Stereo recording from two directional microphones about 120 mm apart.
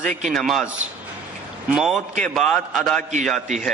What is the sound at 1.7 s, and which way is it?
A man's voice, 5° right (ahead or behind).